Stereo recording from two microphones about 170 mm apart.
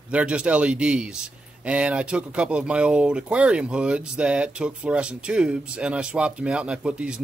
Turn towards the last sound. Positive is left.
turn(degrees=-5)  # may be behind; listen again after turning